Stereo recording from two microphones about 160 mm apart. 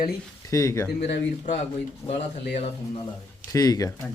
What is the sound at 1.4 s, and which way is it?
Speech, 45° left (ahead or behind).